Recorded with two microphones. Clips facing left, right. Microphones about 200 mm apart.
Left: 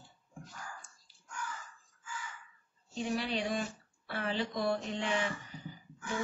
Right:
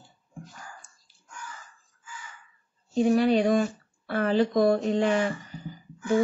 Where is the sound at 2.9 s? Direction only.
50° right (ahead or behind).